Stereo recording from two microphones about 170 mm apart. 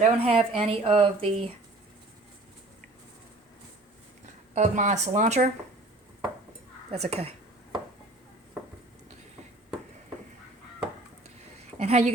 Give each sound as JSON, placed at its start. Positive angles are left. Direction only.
{"t": 0.0, "sound": "speech", "side_deg": -35}
{"t": 4.5, "sound": "speech", "side_deg": -45}
{"t": 6.9, "sound": "a sound", "side_deg": -35}
{"t": 11.8, "sound": "a woman's voice", "side_deg": -40}